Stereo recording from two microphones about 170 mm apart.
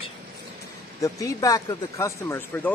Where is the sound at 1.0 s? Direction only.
20° left (ahead or behind).